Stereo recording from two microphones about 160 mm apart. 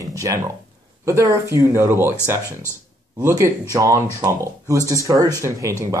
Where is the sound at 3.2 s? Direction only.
20° right (ahead or behind).